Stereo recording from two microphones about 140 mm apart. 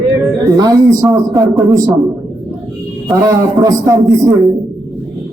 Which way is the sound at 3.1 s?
25° right (ahead or behind).